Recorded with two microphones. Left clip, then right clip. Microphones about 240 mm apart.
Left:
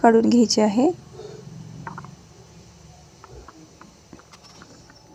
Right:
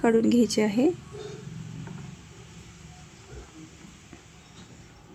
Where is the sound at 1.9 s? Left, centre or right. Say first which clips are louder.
Left 14 dB; left.